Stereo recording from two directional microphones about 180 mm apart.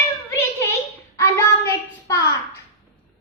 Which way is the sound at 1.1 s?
15° left (ahead or behind).